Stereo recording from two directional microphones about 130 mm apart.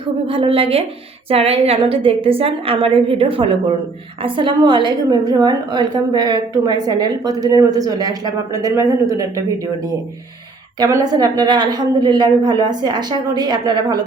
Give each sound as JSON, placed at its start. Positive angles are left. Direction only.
{"t": 0.0, "sound": "a woman's voice", "side_deg": -40}
{"t": 10.8, "sound": "a woman's voice", "side_deg": -30}